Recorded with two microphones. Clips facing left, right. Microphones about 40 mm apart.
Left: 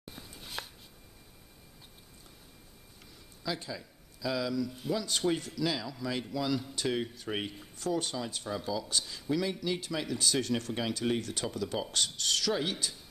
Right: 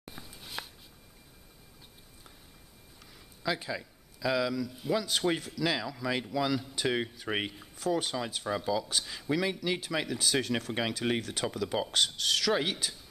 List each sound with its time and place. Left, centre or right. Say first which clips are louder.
0.1 s a sound: even; centre
3.4 s speech: right 4 dB; centre
4.6 s speech: right 2 dB; centre; by 7.5 s right
7.5 s speech: right 2 dB; centre